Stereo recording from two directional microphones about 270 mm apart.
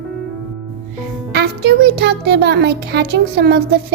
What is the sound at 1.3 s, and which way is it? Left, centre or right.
A child's voice, right.